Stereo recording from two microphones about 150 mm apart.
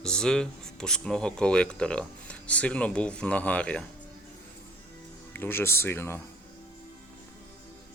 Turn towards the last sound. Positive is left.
turn(degrees=15)  # may be behind; listen again after turning